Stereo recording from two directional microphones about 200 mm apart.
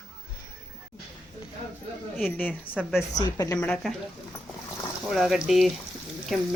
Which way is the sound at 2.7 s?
Centre (ahead or behind).